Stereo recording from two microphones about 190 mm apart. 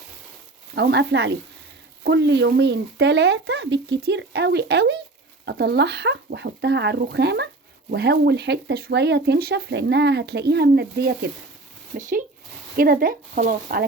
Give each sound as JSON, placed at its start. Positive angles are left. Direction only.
{"t": 0.8, "sound": "speech", "side_deg": -60}
{"t": 11.9, "sound": "speech", "side_deg": -40}